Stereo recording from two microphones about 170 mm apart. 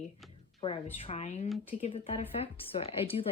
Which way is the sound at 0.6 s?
35° left (ahead or behind).